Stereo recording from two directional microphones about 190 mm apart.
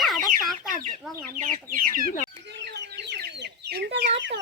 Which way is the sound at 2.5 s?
60° right (ahead or behind).